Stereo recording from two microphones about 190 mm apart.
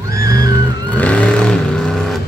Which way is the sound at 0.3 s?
20° right (ahead or behind).